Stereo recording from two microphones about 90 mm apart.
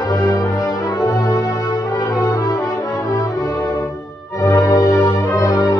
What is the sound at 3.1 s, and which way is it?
Music, 35° left (ahead or behind).